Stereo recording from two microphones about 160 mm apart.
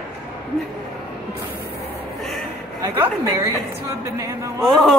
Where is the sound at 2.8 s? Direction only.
20° right (ahead or behind).